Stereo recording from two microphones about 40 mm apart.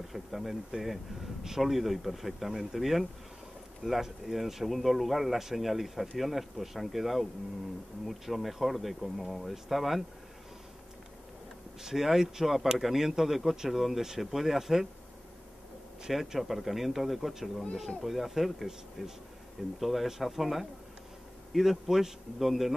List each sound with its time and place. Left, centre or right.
0.1 s speech: centre
11.8 s speech: centre
16.1 s speech: centre